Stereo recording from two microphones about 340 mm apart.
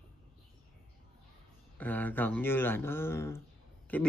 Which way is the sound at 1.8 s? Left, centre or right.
Centre.